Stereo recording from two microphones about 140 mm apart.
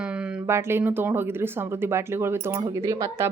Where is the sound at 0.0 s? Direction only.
5° right (ahead or behind).